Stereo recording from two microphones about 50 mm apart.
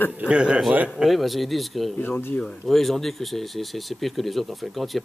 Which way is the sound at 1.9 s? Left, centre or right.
Left.